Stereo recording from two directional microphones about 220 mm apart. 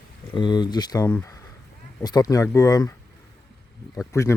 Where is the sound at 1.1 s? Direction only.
5° left (ahead or behind).